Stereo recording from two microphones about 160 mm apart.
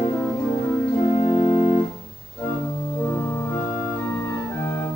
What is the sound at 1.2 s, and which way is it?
Organ, 35° left (ahead or behind).